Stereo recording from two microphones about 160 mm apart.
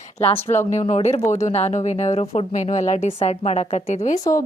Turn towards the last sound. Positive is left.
turn(degrees=20)  # may be behind; listen again after turning